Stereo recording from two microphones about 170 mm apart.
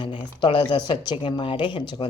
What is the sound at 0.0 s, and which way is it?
Speech, 30° left (ahead or behind).